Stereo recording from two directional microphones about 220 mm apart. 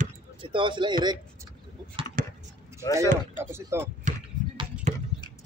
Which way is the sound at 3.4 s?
10° right (ahead or behind).